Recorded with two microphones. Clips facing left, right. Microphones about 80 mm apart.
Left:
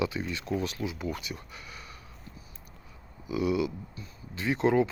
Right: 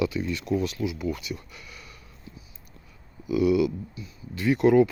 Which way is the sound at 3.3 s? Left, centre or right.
Left.